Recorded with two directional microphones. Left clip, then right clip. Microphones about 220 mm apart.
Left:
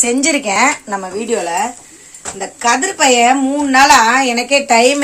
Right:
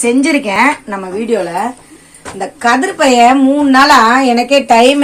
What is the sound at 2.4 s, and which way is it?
Speech, centre (ahead or behind).